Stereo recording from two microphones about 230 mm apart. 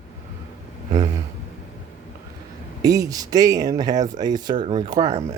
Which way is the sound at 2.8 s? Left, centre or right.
Centre.